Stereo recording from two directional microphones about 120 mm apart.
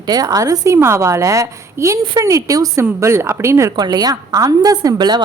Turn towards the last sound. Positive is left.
turn(degrees=-35)  # may be behind; listen again after turning